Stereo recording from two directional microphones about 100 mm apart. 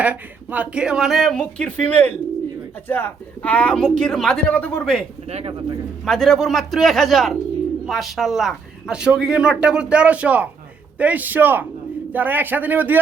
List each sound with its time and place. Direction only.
0.0 s speech: 15° right (ahead or behind); by 5.0 s 10° left (ahead or behind)
5.3 s speech: 90° right
6.1 s speech: 5° left (ahead or behind); by 13.0 s 20° right (ahead or behind)